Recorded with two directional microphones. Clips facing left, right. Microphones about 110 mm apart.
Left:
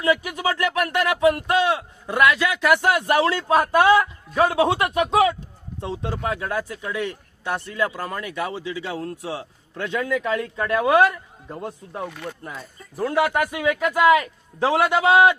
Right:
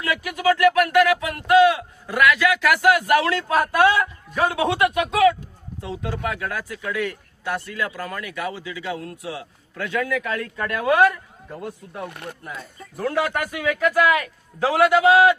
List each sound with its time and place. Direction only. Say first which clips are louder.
0.0 s a man's voice: left 1 dB; 25° left (ahead or behind)
12.0 s speech: left 1 dB; 65° right (ahead or behind)
13.0 s a man's voice: left 2 dB; 20° left (ahead or behind)